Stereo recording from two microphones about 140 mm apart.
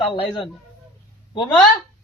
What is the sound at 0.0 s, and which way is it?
Speech, 40° left (ahead or behind).